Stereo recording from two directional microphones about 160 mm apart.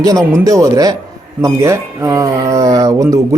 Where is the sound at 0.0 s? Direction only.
20° right (ahead or behind).